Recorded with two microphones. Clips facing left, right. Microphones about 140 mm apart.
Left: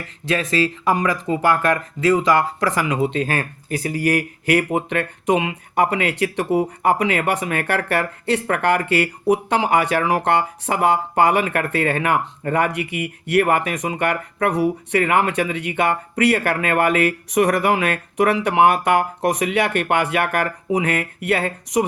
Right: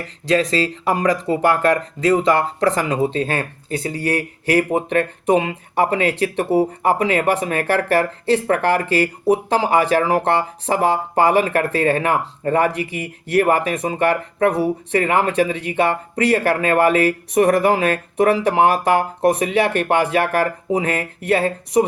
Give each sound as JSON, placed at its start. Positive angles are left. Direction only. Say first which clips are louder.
{"t": 0.0, "sound": "speech", "louder": "right 5 dB", "side_deg": -30}